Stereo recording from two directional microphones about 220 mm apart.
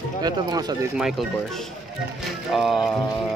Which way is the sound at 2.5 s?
Centre (ahead or behind).